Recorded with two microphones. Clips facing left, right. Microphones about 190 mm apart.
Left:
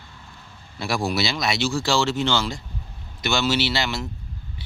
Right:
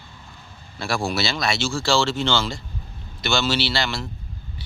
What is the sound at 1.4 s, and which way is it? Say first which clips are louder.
Speech: even; 20° left (ahead or behind).